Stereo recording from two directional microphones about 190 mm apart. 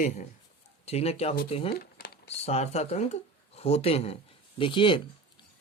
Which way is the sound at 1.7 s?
55° left (ahead or behind).